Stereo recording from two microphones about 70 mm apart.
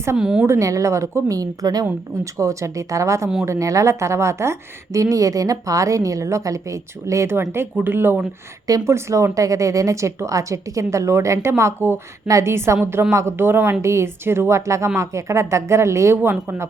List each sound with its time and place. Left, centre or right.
0.2 s a woman's voice: centre
0.4 s a woman's voice: right
2.4 s a woman's voice: right
7.8 s speech: right
8.9 s a woman's voice: right